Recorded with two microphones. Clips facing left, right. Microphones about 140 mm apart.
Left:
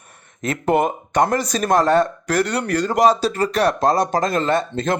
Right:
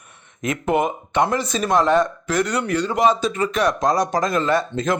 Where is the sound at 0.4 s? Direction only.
35° left (ahead or behind).